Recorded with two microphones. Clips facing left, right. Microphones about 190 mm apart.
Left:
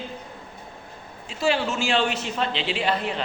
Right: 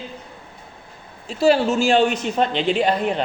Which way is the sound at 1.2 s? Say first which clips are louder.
Right 7 dB; 40° right (ahead or behind).